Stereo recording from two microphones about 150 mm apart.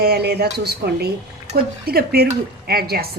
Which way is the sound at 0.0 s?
90° right.